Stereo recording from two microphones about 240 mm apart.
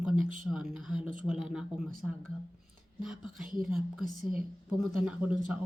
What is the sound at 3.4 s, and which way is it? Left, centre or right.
Speech, right.